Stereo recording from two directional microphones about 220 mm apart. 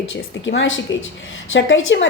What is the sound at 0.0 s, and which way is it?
A woman's voice, 60° left (ahead or behind).